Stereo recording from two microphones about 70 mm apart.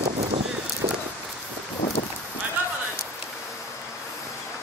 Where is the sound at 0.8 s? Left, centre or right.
Right.